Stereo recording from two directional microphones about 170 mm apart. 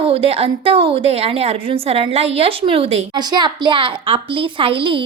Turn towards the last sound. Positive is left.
turn(degrees=-30)  # may be behind; listen again after turning